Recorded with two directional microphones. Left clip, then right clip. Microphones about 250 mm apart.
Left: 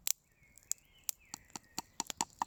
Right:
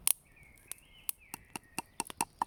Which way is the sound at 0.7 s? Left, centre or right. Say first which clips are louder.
Left 9 dB; left.